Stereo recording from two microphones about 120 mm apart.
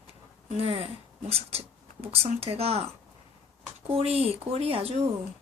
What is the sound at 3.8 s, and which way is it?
Speech, 55° right (ahead or behind).